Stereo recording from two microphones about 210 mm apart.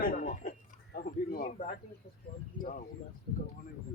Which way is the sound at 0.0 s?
40° left (ahead or behind).